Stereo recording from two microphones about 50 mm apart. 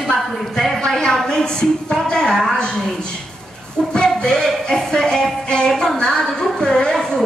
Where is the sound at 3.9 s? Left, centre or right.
Centre.